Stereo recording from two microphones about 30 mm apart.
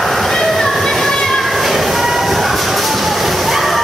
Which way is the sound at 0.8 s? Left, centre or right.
Centre.